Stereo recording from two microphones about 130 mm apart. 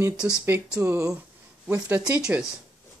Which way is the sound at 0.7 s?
20° right (ahead or behind).